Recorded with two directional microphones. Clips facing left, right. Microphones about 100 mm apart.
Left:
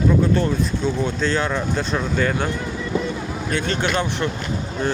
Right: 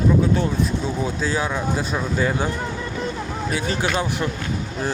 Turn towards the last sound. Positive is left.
turn(degrees=-5)  # may be behind; listen again after turning